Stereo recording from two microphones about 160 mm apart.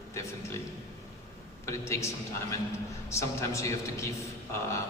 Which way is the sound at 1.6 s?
20° left (ahead or behind).